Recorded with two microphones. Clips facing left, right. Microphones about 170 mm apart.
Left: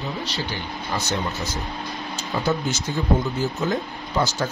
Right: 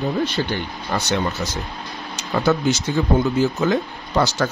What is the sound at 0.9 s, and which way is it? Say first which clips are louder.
Speech: right 4 dB; 70° right (ahead or behind).